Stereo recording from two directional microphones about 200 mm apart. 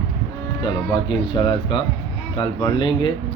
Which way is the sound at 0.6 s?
25° left (ahead or behind).